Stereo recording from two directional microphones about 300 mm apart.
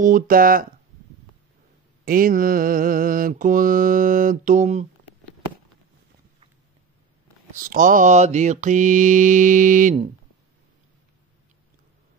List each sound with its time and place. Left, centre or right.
0.0 s mantra: right
2.0 s mantra: right
7.5 s mantra: right